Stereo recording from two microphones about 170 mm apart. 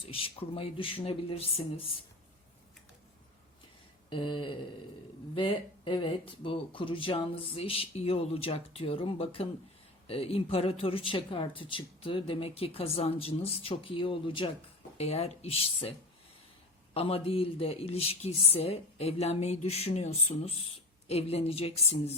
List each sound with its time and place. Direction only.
0.0 s speech: 35° left (ahead or behind)
4.1 s speech: 30° left (ahead or behind)